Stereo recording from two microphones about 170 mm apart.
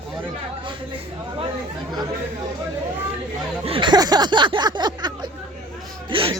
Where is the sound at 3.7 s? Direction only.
30° right (ahead or behind).